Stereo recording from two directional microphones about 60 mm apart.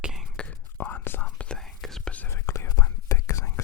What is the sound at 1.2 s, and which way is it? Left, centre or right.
Whispering, centre.